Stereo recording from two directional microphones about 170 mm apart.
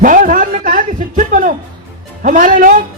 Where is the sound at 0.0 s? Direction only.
50° right (ahead or behind).